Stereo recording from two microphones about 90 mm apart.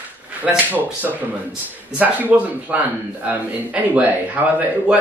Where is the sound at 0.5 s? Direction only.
10° right (ahead or behind).